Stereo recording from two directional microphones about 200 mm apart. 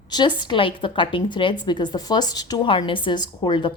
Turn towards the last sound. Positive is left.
turn(degrees=25)  # may be behind; listen again after turning